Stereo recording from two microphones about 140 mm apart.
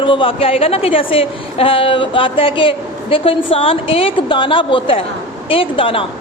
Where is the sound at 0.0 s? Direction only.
35° left (ahead or behind).